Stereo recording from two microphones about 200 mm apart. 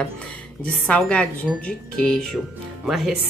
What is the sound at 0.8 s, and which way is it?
Speech, 5° left (ahead or behind).